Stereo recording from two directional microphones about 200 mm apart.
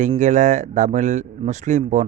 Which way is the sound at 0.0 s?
35° right (ahead or behind).